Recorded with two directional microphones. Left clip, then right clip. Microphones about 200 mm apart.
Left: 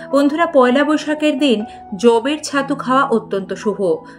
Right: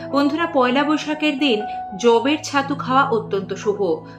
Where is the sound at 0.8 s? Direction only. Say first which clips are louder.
Left 4 dB; 50° left (ahead or behind).